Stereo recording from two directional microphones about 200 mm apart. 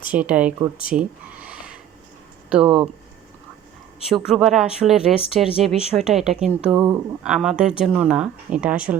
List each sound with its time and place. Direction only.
0.1 s speech: 5° right (ahead or behind)
4.1 s speech: centre (ahead or behind)
6.7 s speech: 20° right (ahead or behind)
7.3 s speech: 5° right (ahead or behind)